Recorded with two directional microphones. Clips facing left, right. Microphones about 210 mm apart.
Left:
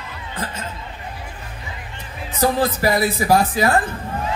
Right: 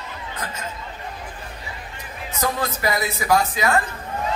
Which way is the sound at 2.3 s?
30° left (ahead or behind).